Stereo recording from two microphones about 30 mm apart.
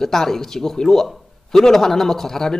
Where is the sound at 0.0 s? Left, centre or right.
Centre.